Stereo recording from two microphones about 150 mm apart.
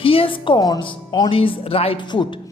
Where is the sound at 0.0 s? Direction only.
40° left (ahead or behind).